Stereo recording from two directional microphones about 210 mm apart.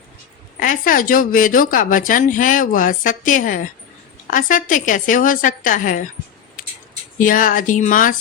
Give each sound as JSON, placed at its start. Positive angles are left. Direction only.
{"t": 0.6, "sound": "a woman's voice", "side_deg": 40}
{"t": 7.2, "sound": "a woman's voice", "side_deg": 40}